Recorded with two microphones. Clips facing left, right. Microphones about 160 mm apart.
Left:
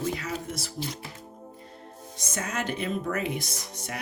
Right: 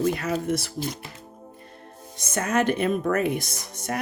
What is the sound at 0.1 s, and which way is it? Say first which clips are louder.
Speech: right 7 dB; 60° right (ahead or behind).